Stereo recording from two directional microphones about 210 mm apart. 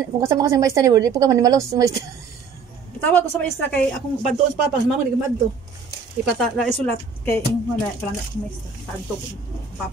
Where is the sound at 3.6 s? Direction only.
10° left (ahead or behind).